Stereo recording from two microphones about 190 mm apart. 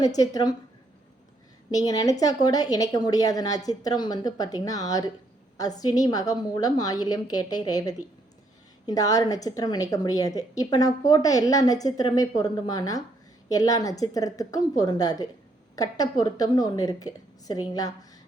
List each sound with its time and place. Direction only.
0.0 s a woman's voice: 20° left (ahead or behind)
1.7 s a woman's voice: 20° left (ahead or behind)